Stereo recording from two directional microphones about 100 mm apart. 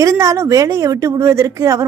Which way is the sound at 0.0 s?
30° right (ahead or behind).